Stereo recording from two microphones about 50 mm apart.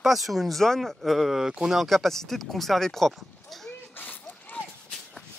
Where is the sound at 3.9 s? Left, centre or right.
Left.